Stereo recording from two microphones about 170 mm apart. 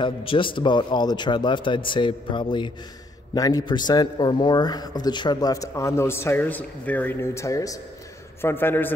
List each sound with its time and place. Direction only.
0.0 s a man's voice: 30° left (ahead or behind); by 8.9 s 10° left (ahead or behind)